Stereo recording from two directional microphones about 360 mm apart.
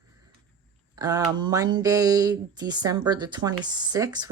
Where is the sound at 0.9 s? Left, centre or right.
Centre.